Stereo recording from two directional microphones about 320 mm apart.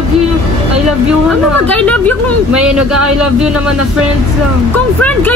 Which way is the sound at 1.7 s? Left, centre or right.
Centre.